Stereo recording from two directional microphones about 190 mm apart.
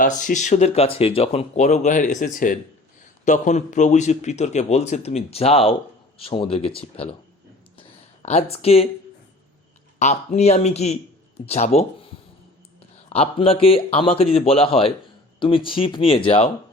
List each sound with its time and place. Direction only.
0.0 s speech: 40° left (ahead or behind)
7.8 s a sound: 35° left (ahead or behind)
8.5 s speech: 30° left (ahead or behind)
10.0 s speech: 40° left (ahead or behind)
13.1 s speech: 30° left (ahead or behind)